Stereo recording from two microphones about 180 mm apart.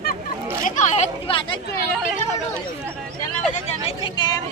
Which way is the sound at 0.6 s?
40° left (ahead or behind).